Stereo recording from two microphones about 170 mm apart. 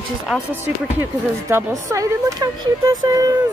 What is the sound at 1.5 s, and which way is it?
A woman's voice, 20° right (ahead or behind).